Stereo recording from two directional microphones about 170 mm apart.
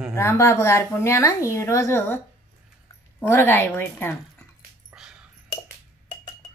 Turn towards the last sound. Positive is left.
turn(degrees=-5)  # may be behind; listen again after turning